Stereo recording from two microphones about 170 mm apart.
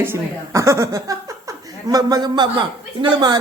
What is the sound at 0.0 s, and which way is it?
Speech, 15° right (ahead or behind).